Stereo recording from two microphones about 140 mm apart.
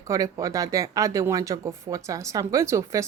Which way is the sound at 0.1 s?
25° right (ahead or behind).